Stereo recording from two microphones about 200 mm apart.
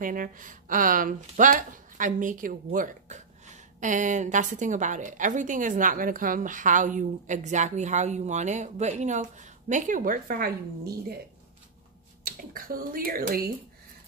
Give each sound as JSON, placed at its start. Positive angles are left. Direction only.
{"t": 0.0, "sound": "speech", "side_deg": -40}
{"t": 12.3, "sound": "speech", "side_deg": -45}